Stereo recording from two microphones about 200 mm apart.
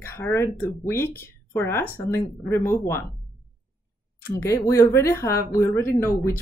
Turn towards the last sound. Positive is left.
turn(degrees=10)  # may be behind; listen again after turning